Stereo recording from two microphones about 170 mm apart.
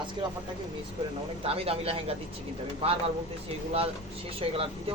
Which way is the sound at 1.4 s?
35° right (ahead or behind).